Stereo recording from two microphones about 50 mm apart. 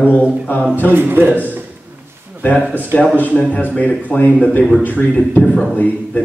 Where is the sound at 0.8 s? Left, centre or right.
Right.